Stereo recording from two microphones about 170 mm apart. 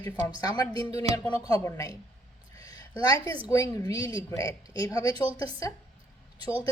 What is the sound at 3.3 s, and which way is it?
Speech, 20° left (ahead or behind).